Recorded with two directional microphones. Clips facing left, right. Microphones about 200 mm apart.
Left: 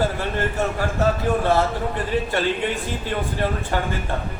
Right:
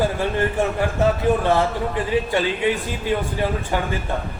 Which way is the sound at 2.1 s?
15° right (ahead or behind).